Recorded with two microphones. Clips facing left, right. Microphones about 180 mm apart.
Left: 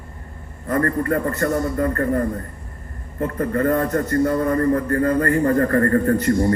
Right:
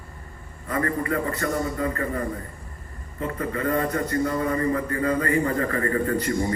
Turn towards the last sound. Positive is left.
turn(degrees=55)  # may be behind; listen again after turning